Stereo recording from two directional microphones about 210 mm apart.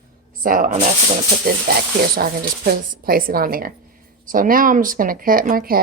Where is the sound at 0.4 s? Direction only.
40° right (ahead or behind).